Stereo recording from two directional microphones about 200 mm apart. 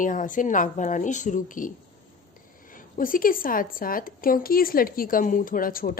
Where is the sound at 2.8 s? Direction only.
45° left (ahead or behind).